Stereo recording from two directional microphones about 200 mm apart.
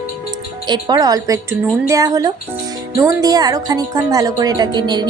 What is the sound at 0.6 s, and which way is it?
A woman's voice, 20° right (ahead or behind).